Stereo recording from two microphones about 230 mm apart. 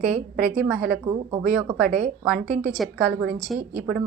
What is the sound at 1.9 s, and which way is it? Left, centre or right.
Speech, right.